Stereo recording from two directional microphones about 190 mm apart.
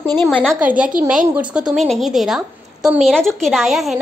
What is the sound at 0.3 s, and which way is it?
A woman's voice, 5° left (ahead or behind).